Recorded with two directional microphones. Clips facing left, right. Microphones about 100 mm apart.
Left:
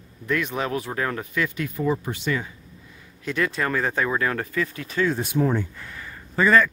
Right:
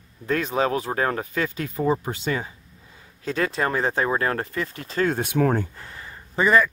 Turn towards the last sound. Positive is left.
turn(degrees=-15)  # may be behind; listen again after turning